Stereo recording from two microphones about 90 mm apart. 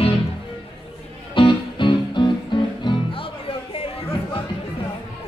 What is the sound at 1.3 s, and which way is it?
Music, 65° left (ahead or behind).